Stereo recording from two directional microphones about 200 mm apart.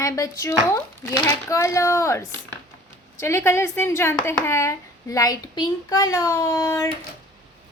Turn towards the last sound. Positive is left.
turn(degrees=15)  # may be behind; listen again after turning